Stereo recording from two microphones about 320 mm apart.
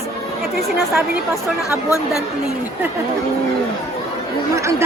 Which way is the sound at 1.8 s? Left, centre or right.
Centre.